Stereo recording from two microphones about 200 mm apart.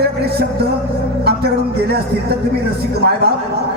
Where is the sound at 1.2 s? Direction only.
50° right (ahead or behind).